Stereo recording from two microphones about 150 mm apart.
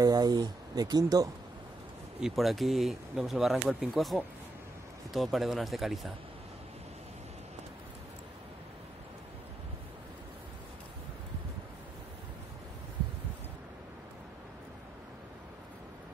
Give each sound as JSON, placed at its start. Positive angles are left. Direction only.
{"t": 0.0, "sound": "speech", "side_deg": -25}
{"t": 2.1, "sound": "speech", "side_deg": 0}